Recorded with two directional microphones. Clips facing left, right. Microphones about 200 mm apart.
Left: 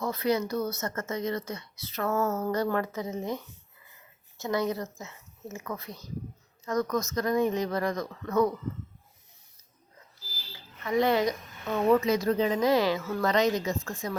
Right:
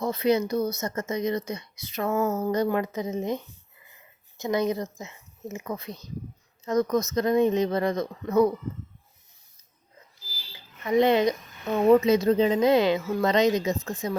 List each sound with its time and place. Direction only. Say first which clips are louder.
0.0 s a woman's voice: right 4 dB; 20° right (ahead or behind)
10.2 s a sound: left 1 dB; 10° right (ahead or behind)
10.8 s a woman's voice: right 4 dB; 20° right (ahead or behind)